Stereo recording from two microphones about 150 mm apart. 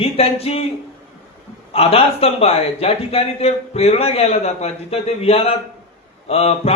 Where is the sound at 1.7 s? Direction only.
40° left (ahead or behind).